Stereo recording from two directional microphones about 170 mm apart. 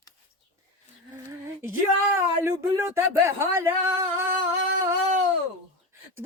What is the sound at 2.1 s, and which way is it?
Speech, 15° right (ahead or behind).